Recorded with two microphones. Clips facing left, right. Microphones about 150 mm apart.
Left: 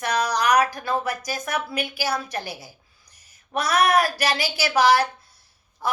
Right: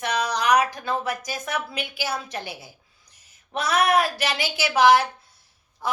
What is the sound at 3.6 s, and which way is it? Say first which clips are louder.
Speech: left 1 dB; 25° right (ahead or behind).